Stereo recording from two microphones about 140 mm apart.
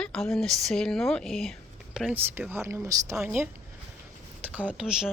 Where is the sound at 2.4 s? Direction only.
15° right (ahead or behind).